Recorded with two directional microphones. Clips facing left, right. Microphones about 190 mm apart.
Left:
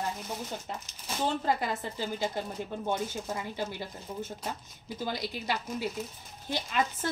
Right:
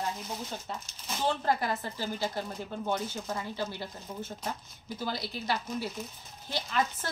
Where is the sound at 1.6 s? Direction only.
15° left (ahead or behind).